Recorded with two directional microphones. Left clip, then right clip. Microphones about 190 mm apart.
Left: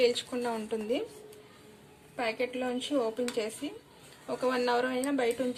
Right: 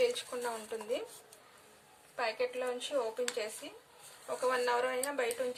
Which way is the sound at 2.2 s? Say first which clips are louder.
Left 2 dB; 25° right (ahead or behind).